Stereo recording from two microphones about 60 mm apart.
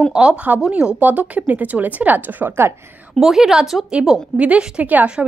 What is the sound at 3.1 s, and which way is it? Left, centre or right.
A woman's voice, centre.